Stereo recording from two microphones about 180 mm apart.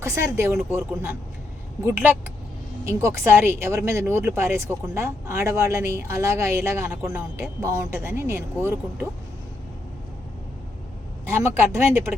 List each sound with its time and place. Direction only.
0.0 s speech: 15° right (ahead or behind)
11.3 s speech: 15° right (ahead or behind)